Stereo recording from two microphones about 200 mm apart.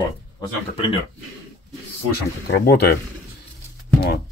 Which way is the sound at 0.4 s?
25° left (ahead or behind).